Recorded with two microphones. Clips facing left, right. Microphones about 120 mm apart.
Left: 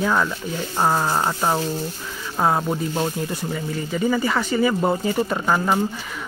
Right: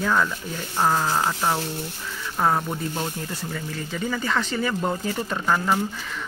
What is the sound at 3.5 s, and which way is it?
Speech, 10° left (ahead or behind).